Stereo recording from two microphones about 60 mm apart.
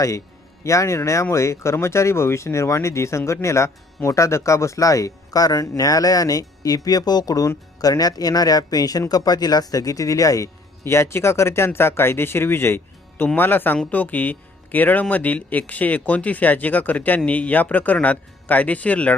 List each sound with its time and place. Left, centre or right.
0.6 s speech: left
10.8 s speech: left